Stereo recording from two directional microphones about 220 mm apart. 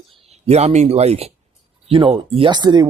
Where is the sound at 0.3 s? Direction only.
30° right (ahead or behind).